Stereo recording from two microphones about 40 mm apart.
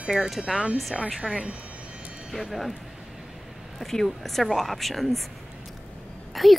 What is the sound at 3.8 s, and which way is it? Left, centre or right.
Speech, centre.